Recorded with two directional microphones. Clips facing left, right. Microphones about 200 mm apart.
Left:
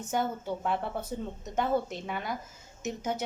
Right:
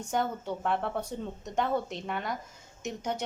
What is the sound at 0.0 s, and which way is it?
A woman's voice, 5° left (ahead or behind).